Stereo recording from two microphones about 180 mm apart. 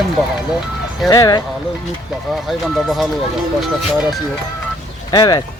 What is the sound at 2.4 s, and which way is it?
Speech, centre (ahead or behind).